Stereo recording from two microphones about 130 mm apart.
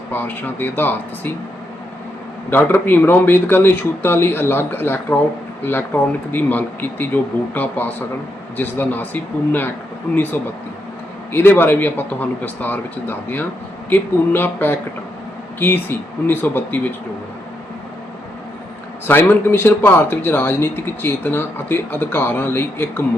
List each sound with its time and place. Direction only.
0.1 s a man's voice: 15° left (ahead or behind)
2.5 s a man's voice: 15° left (ahead or behind)
19.0 s a man's voice: 15° left (ahead or behind)